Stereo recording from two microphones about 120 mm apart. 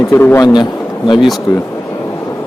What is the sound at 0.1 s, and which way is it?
Speech, 20° left (ahead or behind).